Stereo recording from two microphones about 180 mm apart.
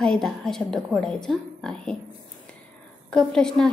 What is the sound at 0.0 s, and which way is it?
A woman's voice, 5° left (ahead or behind).